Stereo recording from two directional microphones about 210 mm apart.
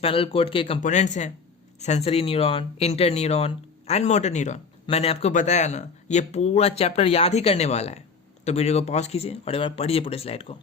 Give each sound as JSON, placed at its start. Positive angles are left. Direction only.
{"t": 0.0, "sound": "speech", "side_deg": 25}
{"t": 0.8, "sound": "speech", "side_deg": 35}